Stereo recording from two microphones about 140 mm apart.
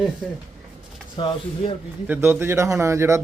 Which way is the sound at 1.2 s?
35° left (ahead or behind).